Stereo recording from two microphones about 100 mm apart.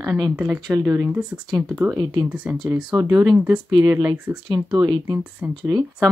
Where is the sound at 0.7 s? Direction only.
30° right (ahead or behind).